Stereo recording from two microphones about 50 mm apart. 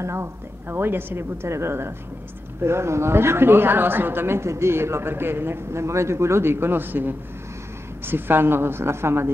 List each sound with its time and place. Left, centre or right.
0.0 s a woman's voice: right